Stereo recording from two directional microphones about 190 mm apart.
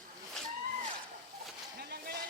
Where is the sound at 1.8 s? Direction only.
55° right (ahead or behind).